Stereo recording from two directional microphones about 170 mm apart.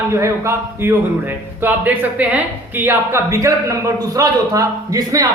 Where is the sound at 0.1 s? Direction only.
15° right (ahead or behind).